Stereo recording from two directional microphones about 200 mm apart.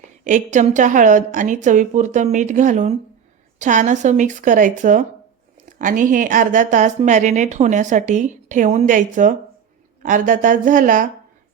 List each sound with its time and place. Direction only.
0.3 s a woman's voice: 40° right (ahead or behind)